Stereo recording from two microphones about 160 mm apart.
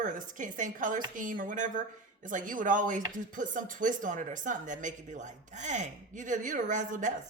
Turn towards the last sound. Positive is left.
turn(degrees=-50)  # may be behind; listen again after turning